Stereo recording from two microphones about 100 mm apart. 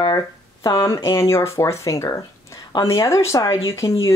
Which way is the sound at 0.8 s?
35° left (ahead or behind).